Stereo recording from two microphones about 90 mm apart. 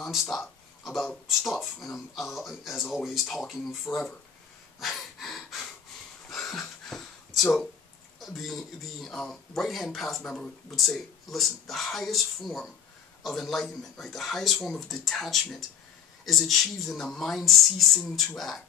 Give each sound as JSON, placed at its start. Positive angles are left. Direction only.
{"t": 0.0, "sound": "speech", "side_deg": 0}
{"t": 3.8, "sound": "speech", "side_deg": 15}
{"t": 4.7, "sound": "breathing", "side_deg": 0}
{"t": 6.2, "sound": "a sound", "side_deg": 5}
{"t": 8.2, "sound": "speech", "side_deg": 0}